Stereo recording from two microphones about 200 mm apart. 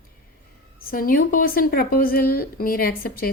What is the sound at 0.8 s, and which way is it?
A woman's voice, 45° left (ahead or behind).